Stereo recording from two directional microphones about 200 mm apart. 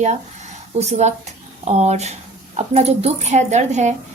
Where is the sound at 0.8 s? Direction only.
35° right (ahead or behind).